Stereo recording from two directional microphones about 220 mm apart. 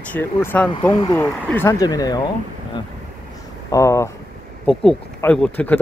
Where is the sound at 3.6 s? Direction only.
15° left (ahead or behind).